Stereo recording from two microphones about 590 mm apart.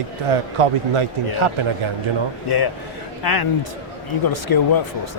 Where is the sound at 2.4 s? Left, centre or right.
Left.